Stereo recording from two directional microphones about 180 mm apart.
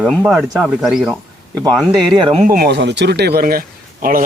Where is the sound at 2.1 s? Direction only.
25° right (ahead or behind).